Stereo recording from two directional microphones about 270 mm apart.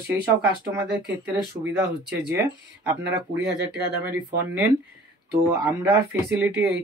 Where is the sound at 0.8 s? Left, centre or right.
Right.